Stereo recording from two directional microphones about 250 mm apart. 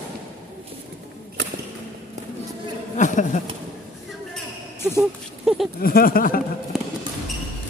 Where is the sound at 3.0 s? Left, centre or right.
Left.